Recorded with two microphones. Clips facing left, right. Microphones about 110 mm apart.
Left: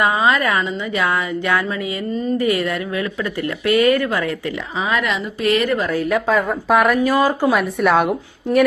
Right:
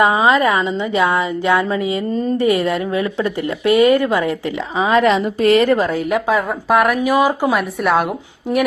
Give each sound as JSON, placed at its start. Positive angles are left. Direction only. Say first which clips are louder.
{"t": 0.0, "sound": "a woman's voice", "louder": "right 3 dB", "side_deg": -25}
{"t": 5.9, "sound": "a woman's voice", "louder": "right 1 dB", "side_deg": -20}
{"t": 6.3, "sound": "a woman's voice", "louder": "right 1 dB", "side_deg": 0}
{"t": 7.0, "sound": "speech", "louder": "right 1 dB", "side_deg": -15}
{"t": 7.5, "sound": "a woman's voice", "louder": "even", "side_deg": 0}